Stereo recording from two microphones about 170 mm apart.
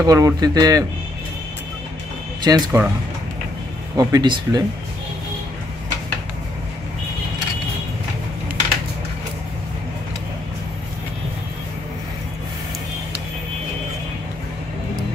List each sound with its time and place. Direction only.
0.0 s speech: 20° right (ahead or behind)
2.4 s speech: 25° right (ahead or behind)
3.9 s speech: 20° right (ahead or behind)